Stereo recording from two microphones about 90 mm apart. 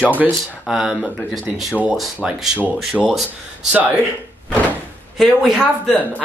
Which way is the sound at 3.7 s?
15° right (ahead or behind).